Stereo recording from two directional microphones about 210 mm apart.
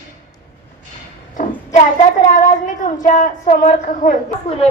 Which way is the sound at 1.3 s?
35° left (ahead or behind).